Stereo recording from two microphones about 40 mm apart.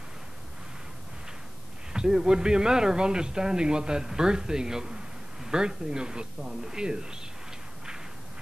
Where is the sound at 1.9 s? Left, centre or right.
Centre.